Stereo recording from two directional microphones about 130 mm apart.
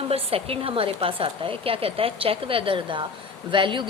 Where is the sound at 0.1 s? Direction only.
50° right (ahead or behind).